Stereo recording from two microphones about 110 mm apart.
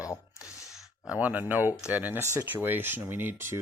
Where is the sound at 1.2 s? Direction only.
15° right (ahead or behind).